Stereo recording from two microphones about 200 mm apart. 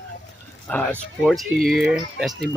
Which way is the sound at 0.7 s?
5° left (ahead or behind).